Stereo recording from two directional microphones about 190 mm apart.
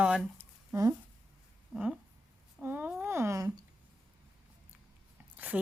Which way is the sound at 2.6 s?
10° right (ahead or behind).